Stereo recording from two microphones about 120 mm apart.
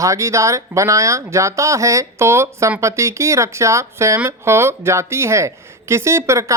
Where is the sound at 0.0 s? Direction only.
25° right (ahead or behind).